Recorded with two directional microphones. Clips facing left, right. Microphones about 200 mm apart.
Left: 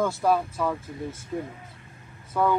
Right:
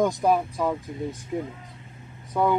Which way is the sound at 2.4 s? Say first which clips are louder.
Right 1 dB; 20° right (ahead or behind).